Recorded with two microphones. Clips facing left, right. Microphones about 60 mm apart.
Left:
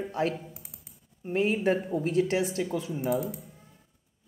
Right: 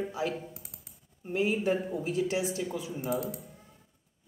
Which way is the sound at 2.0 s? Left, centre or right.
Left.